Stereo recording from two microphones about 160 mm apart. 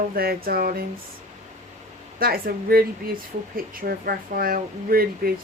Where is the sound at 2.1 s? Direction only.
70° right (ahead or behind).